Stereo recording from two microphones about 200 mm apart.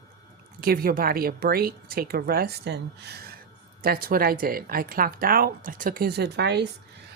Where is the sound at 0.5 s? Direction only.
45° right (ahead or behind).